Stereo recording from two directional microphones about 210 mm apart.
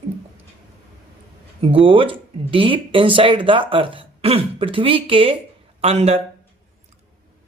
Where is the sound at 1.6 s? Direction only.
25° right (ahead or behind).